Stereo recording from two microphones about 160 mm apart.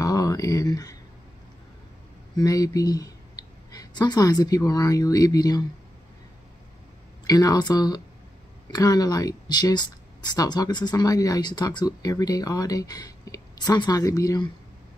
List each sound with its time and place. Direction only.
0.0 s a sound: 25° left (ahead or behind)
2.3 s speech: 25° left (ahead or behind)
7.2 s speech: 25° left (ahead or behind)